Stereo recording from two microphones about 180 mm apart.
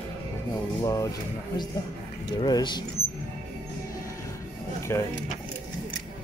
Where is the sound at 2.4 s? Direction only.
25° left (ahead or behind).